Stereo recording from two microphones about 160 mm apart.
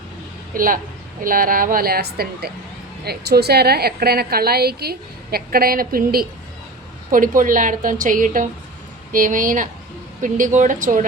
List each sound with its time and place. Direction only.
0.5 s a woman's voice: 60° right (ahead or behind)